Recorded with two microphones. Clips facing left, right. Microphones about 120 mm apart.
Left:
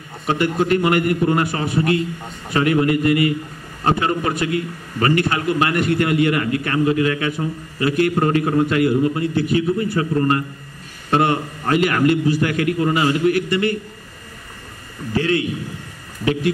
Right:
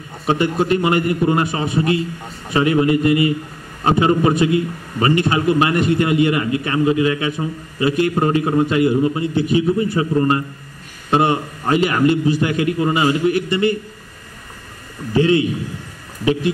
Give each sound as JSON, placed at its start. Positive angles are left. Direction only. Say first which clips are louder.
{"t": 0.3, "sound": "a man's voice", "louder": "right 1 dB", "side_deg": -25}
{"t": 15.1, "sound": "a man's voice", "louder": "right 5 dB", "side_deg": -20}